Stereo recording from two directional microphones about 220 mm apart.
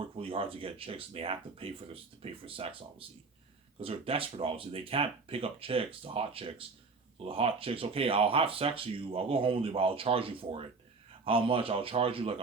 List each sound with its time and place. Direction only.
0.0 s speech: 25° right (ahead or behind)